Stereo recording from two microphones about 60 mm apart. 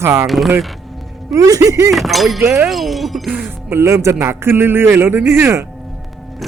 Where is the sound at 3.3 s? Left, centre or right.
Right.